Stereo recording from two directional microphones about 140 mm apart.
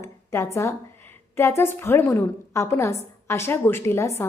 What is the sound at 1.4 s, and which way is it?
A woman's voice, 15° left (ahead or behind).